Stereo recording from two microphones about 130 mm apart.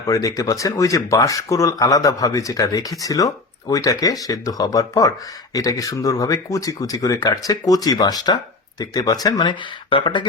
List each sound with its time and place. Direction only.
0.0 s speech: 25° left (ahead or behind)